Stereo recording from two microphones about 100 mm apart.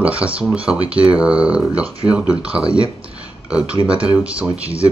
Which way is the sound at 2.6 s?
65° right (ahead or behind).